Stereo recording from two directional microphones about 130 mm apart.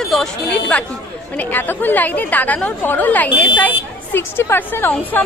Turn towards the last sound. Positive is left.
turn(degrees=15)  # may be behind; listen again after turning